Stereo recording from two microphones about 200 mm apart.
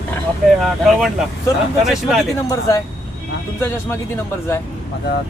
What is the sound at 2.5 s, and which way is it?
Speech, 15° left (ahead or behind).